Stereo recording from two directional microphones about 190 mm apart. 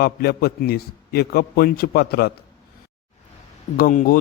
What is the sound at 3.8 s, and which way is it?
Speech, 45° left (ahead or behind).